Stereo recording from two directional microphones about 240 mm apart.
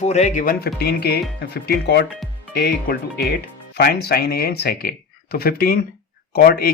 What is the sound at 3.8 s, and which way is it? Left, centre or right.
Speech, left.